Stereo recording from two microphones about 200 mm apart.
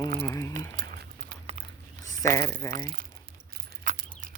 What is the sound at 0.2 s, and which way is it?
Speech, 15° left (ahead or behind).